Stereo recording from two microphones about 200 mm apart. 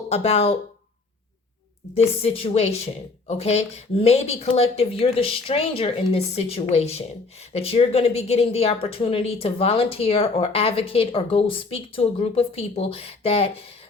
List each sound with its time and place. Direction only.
0.1 s a woman's voice: 30° left (ahead or behind)
2.2 s a woman's voice: 30° left (ahead or behind)